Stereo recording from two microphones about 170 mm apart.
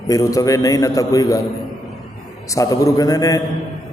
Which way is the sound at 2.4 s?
20° left (ahead or behind).